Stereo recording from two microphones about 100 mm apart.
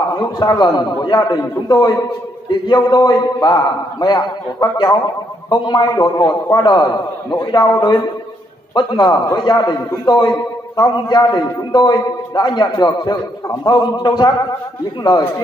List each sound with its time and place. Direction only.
0.1 s a man's voice: 45° left (ahead or behind)